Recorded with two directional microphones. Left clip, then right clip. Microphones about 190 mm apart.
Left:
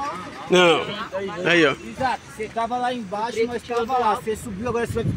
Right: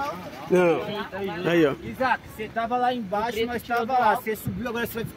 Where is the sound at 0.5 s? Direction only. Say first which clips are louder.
Left 5 dB; 5° right (ahead or behind).